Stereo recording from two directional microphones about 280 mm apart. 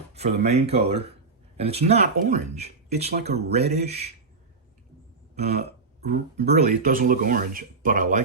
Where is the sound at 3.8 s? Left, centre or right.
Right.